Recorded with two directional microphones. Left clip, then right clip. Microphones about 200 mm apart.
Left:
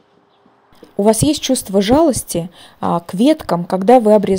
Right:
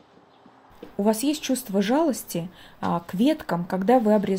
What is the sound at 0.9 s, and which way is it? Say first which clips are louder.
Speech: left 10 dB; 45° left (ahead or behind).